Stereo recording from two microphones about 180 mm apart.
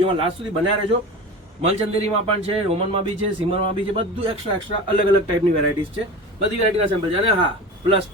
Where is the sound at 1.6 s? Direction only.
35° right (ahead or behind).